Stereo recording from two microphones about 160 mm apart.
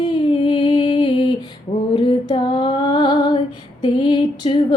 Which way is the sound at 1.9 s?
30° left (ahead or behind).